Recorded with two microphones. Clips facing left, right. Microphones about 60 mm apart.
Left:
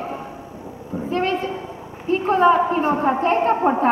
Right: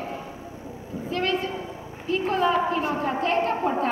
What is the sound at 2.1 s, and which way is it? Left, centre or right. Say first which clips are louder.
A woman's voice: left 7 dB; left.